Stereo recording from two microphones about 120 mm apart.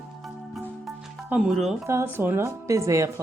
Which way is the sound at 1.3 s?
5° right (ahead or behind).